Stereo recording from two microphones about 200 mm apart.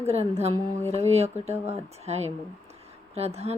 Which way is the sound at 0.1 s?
30° right (ahead or behind).